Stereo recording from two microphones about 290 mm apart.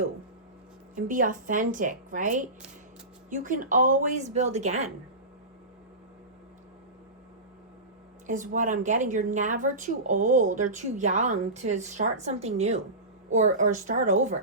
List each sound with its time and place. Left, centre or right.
0.9 s speech: right
8.3 s speech: right